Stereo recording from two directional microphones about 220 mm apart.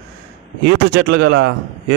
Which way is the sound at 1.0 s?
50° right (ahead or behind).